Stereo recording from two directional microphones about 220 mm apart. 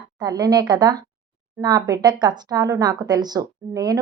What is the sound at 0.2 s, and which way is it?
Speech, 20° right (ahead or behind).